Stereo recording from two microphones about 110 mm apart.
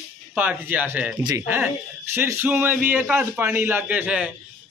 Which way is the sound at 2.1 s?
20° right (ahead or behind).